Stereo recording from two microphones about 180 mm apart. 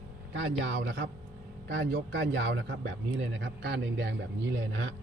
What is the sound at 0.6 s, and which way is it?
A man's voice, 90° right.